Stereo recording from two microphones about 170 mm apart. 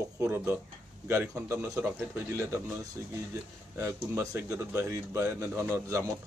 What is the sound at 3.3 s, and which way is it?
Speech, 15° right (ahead or behind).